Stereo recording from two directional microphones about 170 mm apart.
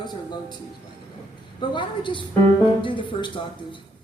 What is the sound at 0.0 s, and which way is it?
Speech, 25° left (ahead or behind).